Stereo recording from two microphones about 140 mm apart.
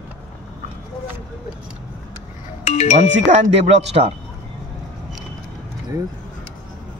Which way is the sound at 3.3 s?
50° right (ahead or behind).